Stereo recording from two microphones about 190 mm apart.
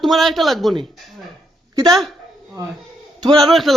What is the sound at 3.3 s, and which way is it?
Speech, centre (ahead or behind).